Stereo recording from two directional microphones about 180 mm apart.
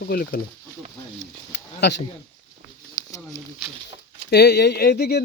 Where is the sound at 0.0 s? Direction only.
55° left (ahead or behind).